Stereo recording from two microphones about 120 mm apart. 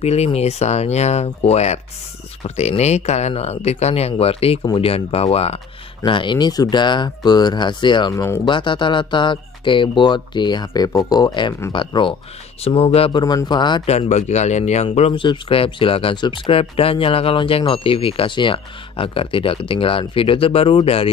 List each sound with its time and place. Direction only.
0.0 s speech: 60° left (ahead or behind)
6.0 s speech: 40° left (ahead or behind)
8.1 s speech: 25° left (ahead or behind)
8.5 s speech: 40° left (ahead or behind)
12.6 s speech: 55° left (ahead or behind)
13.2 s speech: 35° left (ahead or behind)
13.8 s speech: 65° left (ahead or behind)
15.1 s speech: 45° left (ahead or behind)